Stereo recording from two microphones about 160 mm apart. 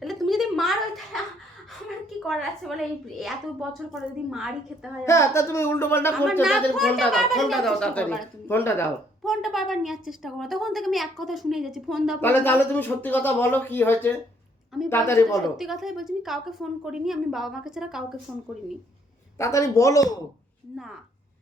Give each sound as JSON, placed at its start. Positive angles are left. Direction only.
{"t": 0.0, "sound": "a sound", "side_deg": 0}
{"t": 2.0, "sound": "a woman's voice", "side_deg": 0}
{"t": 5.0, "sound": "speech", "side_deg": 15}
{"t": 6.7, "sound": "a woman's voice", "side_deg": 0}
{"t": 9.2, "sound": "a woman's voice", "side_deg": 0}
{"t": 12.2, "sound": "speech", "side_deg": 15}
{"t": 15.5, "sound": "a woman's voice", "side_deg": 0}
{"t": 19.4, "sound": "speech", "side_deg": 20}